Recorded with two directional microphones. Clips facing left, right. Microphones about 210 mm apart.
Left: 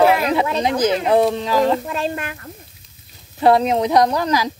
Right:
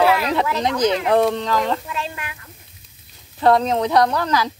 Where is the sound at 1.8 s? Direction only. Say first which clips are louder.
Left 6 dB; 50° left (ahead or behind).